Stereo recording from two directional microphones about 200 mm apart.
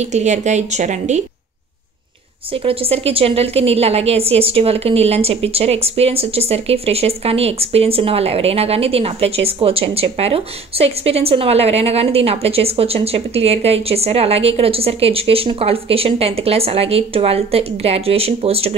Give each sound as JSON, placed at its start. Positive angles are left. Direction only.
{"t": 0.0, "sound": "a woman's voice", "side_deg": -35}
{"t": 2.5, "sound": "a woman's voice", "side_deg": -25}